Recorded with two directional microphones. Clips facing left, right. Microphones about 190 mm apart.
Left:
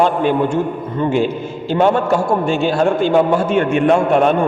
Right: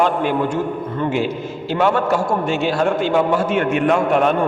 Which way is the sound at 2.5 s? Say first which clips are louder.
Left 2 dB; 30° left (ahead or behind).